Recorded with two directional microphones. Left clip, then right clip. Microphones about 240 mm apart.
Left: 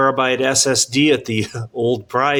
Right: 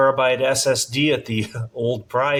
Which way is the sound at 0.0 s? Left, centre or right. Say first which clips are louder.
Left 1 dB; left.